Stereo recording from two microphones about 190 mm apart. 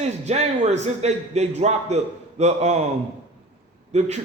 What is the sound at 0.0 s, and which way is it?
A man's voice, 35° right (ahead or behind).